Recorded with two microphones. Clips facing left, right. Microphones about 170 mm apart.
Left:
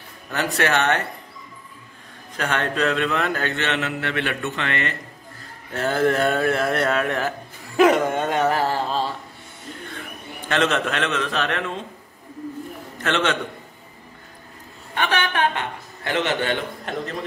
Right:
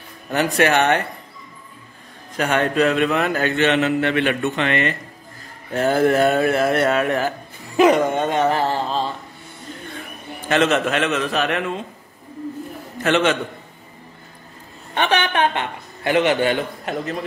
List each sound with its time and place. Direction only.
0.3 s a man's voice: 15° right (ahead or behind)
2.3 s a man's voice: 10° right (ahead or behind); by 9.1 s 5° left (ahead or behind)
10.5 s a man's voice: 5° right (ahead or behind)
13.0 s a man's voice: 10° right (ahead or behind)
15.0 s a man's voice: 20° right (ahead or behind)